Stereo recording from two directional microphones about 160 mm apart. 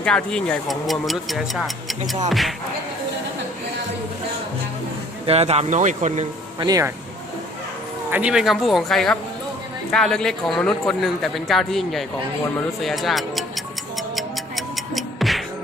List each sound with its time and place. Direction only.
0.0 s a man's voice: 5° left (ahead or behind)
5.2 s speech: 40° right (ahead or behind)
6.6 s speech: 20° right (ahead or behind)
8.1 s a man's voice: 5° right (ahead or behind)
13.9 s music: centre (ahead or behind)